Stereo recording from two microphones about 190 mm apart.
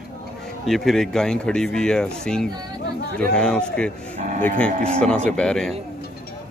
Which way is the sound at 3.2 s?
5° left (ahead or behind).